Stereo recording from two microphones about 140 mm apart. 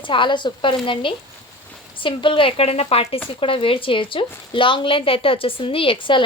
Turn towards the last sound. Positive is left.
turn(degrees=35)  # may be behind; listen again after turning